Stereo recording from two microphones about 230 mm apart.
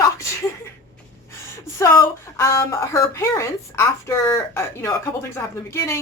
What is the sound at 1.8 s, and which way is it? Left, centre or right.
A woman's voice, centre.